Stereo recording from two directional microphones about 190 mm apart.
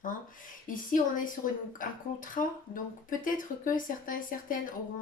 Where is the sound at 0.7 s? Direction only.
45° left (ahead or behind).